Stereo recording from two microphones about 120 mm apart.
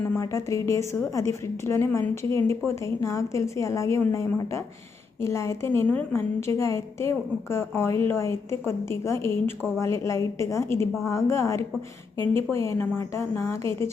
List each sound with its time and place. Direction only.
0.1 s a woman's voice: 25° left (ahead or behind)